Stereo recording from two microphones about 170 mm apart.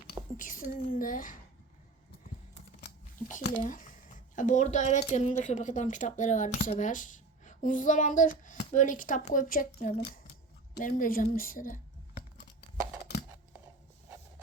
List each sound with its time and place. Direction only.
0.3 s speech: 50° left (ahead or behind)
3.2 s speech: 45° left (ahead or behind)